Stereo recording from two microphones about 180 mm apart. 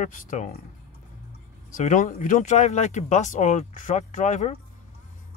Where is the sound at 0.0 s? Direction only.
45° left (ahead or behind).